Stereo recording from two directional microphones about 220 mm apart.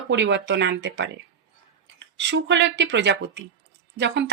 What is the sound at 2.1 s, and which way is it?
Speech, 55° right (ahead or behind).